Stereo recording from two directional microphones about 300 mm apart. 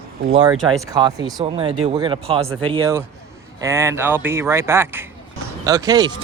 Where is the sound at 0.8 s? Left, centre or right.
Centre.